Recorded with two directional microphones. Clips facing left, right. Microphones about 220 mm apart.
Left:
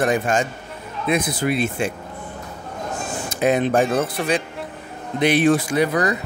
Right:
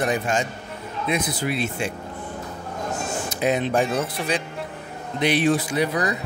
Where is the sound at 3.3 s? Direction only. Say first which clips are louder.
Left 4 dB; 50° left (ahead or behind).